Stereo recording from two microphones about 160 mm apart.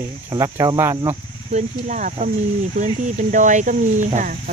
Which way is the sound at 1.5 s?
50° right (ahead or behind).